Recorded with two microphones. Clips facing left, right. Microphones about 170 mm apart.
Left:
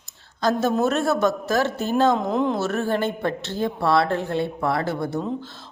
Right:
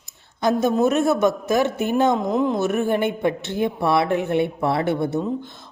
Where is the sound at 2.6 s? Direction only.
15° right (ahead or behind).